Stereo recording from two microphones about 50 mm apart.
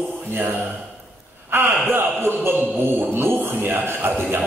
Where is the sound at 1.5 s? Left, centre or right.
Right.